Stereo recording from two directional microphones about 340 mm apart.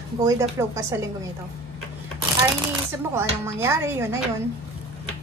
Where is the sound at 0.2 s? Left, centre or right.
Centre.